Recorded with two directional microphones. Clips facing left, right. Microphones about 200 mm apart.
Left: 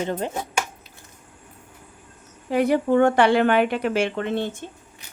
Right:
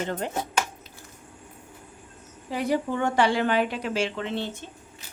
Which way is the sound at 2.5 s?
60° left (ahead or behind).